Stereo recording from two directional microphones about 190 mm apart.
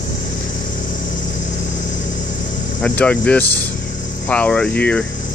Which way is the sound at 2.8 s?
5° left (ahead or behind).